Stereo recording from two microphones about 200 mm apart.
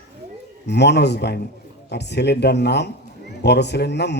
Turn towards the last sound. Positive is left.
turn(degrees=60)  # may be behind; listen again after turning